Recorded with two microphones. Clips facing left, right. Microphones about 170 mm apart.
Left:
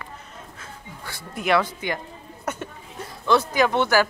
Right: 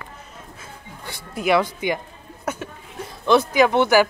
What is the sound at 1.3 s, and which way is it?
Speech, 10° right (ahead or behind).